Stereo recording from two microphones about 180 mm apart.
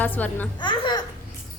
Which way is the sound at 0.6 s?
25° left (ahead or behind).